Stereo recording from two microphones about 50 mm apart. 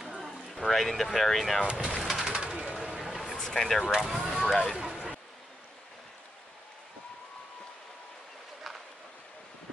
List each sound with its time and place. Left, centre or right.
0.2 s speech: centre
1.7 s speech: centre
2.0 s bird: centre
2.3 s bird: centre
2.8 s a sound: centre
3.3 s vehicle: centre
4.3 s speech: centre
4.7 s a sound: centre